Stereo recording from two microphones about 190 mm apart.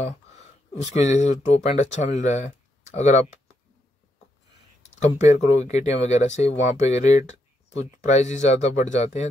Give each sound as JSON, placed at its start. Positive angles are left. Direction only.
{"t": 0.9, "sound": "speech", "side_deg": 35}
{"t": 5.0, "sound": "speech", "side_deg": 35}